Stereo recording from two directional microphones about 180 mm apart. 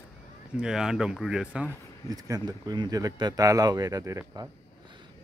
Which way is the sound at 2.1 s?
20° right (ahead or behind).